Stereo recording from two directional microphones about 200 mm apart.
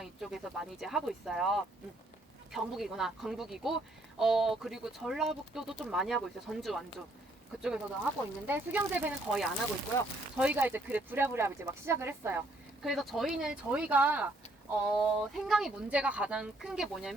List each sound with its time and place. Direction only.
0.0 s speech: centre (ahead or behind)